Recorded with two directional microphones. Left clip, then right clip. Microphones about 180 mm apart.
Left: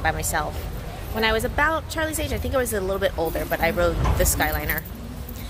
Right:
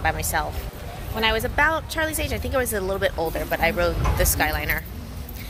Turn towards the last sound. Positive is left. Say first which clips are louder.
# right 1 dB
turn(degrees=5)  # may be behind; listen again after turning